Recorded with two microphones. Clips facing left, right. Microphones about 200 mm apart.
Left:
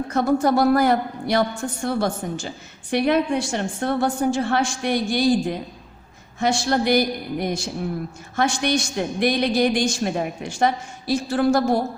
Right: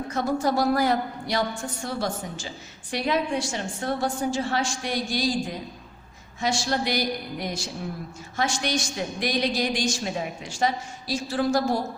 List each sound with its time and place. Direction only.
0.1 s a woman's voice: 60° left (ahead or behind)